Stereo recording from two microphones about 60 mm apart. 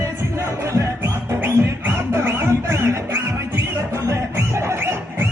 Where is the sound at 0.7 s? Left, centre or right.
Right.